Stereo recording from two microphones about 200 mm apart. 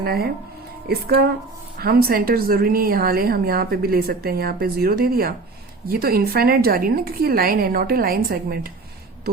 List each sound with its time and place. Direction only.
0.0 s a woman's voice: 50° right (ahead or behind)